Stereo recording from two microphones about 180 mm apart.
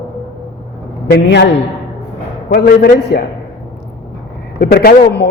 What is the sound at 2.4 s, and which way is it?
Speech, 55° left (ahead or behind).